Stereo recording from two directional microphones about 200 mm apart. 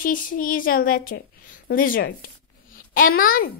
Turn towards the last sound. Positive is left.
turn(degrees=45)  # may be behind; listen again after turning